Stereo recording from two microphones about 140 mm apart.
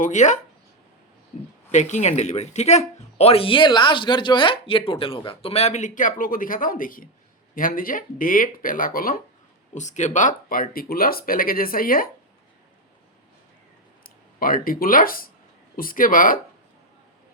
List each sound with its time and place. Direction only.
0.0 s speech: 60° left (ahead or behind)
1.7 s speech: 55° left (ahead or behind); by 9.2 s 90° left
9.7 s speech: 60° left (ahead or behind); by 12.1 s 90° left
14.0 s speech: 90° left